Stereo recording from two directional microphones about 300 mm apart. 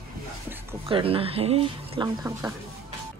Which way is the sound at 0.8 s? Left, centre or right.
Centre.